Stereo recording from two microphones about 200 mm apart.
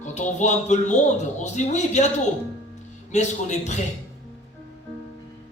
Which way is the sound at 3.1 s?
35° left (ahead or behind).